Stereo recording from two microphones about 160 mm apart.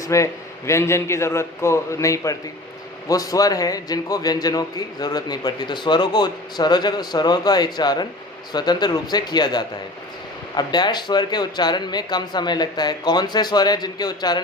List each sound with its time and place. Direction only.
0.0 s a man's voice: 20° left (ahead or behind)